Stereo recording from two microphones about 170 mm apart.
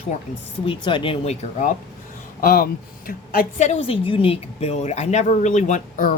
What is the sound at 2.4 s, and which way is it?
Speech, 60° left (ahead or behind).